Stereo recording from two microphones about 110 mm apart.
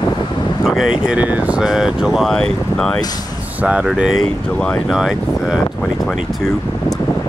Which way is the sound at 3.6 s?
10° right (ahead or behind).